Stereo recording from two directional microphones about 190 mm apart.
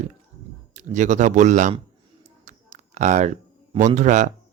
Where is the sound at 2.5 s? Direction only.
40° right (ahead or behind).